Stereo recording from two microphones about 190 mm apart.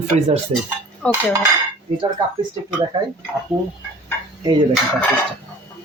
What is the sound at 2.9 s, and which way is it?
Speech, 25° right (ahead or behind).